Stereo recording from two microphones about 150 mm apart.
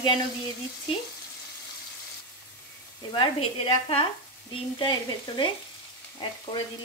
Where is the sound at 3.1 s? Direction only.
35° left (ahead or behind).